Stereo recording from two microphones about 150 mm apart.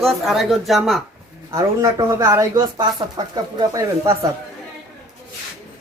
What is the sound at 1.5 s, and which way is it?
Speech, 20° right (ahead or behind).